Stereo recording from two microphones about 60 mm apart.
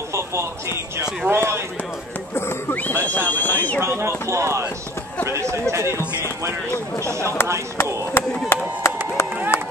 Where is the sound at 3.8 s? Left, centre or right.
Right.